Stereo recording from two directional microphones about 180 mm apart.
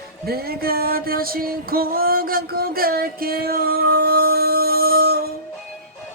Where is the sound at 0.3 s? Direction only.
55° right (ahead or behind).